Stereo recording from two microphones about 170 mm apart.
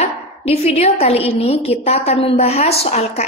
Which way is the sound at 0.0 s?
40° left (ahead or behind).